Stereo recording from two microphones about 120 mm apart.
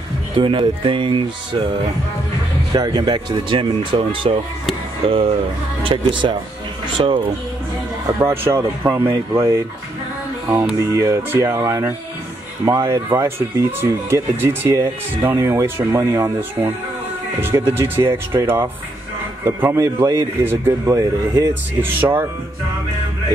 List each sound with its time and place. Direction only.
0.4 s speech: 45° right (ahead or behind)
2.7 s speech: 35° right (ahead or behind)
5.9 s speech: 45° right (ahead or behind)
8.1 s speech: 25° right (ahead or behind)
10.8 s speech: 25° right (ahead or behind)